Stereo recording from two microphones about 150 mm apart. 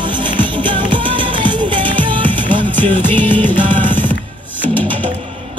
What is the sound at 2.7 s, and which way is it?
Music, 10° left (ahead or behind).